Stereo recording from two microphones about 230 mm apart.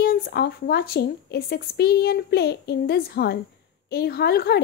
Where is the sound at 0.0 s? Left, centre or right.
Left.